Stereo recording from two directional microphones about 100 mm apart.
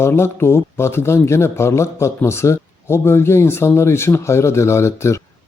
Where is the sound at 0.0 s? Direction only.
25° left (ahead or behind).